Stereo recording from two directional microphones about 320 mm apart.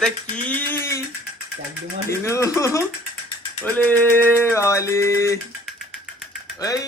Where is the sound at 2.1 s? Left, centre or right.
Centre.